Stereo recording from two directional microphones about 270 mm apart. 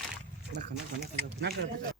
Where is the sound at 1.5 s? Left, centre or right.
Right.